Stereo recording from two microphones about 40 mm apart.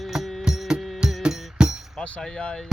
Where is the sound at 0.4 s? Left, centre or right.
Centre.